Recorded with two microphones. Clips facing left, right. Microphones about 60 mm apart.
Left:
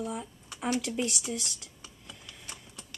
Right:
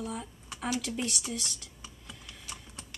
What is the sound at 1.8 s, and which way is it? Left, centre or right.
Computer keyboard, centre.